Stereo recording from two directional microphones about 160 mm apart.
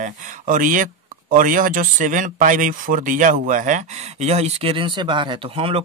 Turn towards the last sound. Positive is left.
turn(degrees=-35)  # may be behind; listen again after turning